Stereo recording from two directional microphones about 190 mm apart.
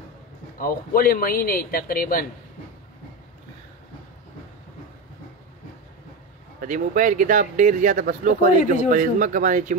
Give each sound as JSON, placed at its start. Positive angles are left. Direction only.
{"t": 0.6, "sound": "a man's voice", "side_deg": 50}
{"t": 6.6, "sound": "speech", "side_deg": -45}